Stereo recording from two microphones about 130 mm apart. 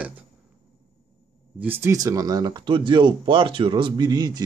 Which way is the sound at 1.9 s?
25° right (ahead or behind).